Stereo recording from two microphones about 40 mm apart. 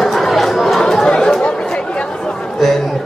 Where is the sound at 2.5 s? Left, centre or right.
Centre.